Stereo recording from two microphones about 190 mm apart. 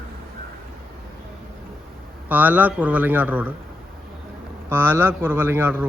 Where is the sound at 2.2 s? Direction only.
10° right (ahead or behind).